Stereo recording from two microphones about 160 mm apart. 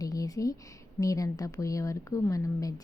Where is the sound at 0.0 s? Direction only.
20° left (ahead or behind).